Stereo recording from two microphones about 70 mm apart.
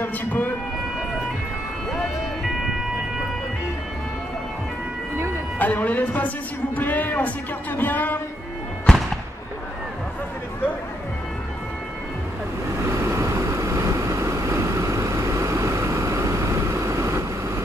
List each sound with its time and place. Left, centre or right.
0.0 s a man's voice: left
1.9 s vehicle: centre
5.6 s a woman's voice: left
8.8 s music: centre
12.8 s vehicle: right